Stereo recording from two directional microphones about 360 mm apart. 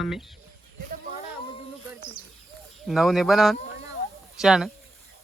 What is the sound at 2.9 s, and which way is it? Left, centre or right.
Speech, centre.